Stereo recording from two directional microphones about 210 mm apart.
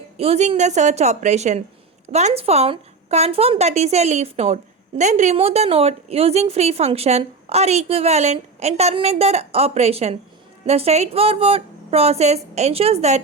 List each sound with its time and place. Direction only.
0.2 s a woman's voice: 30° right (ahead or behind)